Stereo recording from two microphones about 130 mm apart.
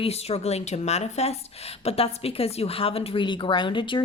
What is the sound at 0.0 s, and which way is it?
A woman's voice, 55° left (ahead or behind).